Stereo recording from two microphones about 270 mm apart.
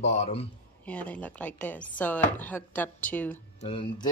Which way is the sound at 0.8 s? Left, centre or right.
Centre.